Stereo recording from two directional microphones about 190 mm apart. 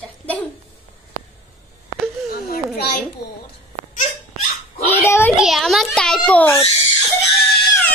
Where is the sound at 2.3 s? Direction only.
50° left (ahead or behind).